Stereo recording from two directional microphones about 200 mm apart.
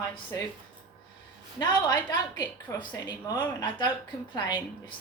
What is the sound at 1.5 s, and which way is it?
A woman's voice, 20° left (ahead or behind).